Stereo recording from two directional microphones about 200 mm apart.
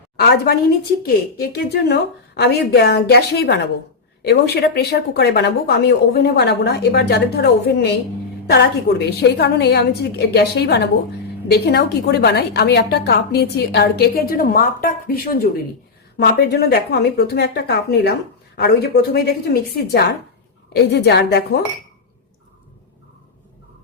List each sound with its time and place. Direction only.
0.2 s a woman's voice: 50° left (ahead or behind)